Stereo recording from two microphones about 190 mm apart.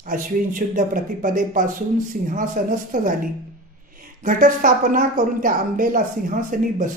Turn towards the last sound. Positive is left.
turn(degrees=-45)  # may be behind; listen again after turning